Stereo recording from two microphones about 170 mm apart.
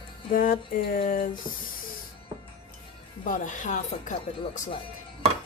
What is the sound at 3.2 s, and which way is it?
Speech, 50° left (ahead or behind).